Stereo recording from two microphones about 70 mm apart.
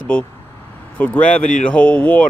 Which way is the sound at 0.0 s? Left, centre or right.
Left.